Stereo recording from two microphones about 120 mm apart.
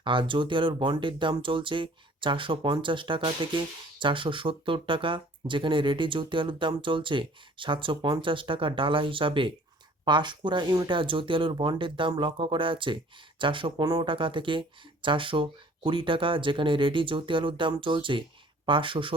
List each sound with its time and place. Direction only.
0.0 s speech: 45° right (ahead or behind)